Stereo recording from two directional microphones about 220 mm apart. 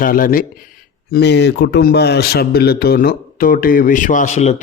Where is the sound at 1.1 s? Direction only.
50° left (ahead or behind).